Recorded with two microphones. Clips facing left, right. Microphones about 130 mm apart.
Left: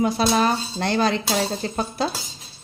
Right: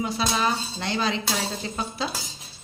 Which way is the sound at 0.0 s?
50° left (ahead or behind).